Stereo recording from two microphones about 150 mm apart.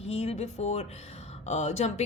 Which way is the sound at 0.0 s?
40° left (ahead or behind).